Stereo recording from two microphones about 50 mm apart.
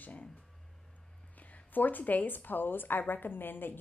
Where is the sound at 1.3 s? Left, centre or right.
Left.